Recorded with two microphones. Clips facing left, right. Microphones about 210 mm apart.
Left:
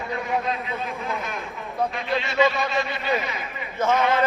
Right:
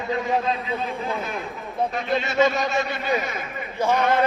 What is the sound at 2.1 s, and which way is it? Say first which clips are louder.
Speech: right 1 dB; 45° right (ahead or behind).